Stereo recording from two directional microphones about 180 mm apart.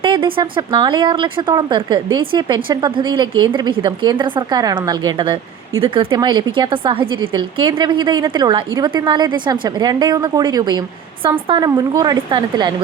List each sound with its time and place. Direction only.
0.0 s a woman's voice: 30° right (ahead or behind)